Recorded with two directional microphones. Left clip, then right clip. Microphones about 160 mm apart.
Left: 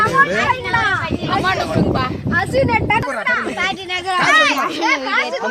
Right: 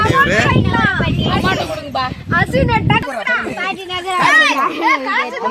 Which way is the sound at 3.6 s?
20° right (ahead or behind).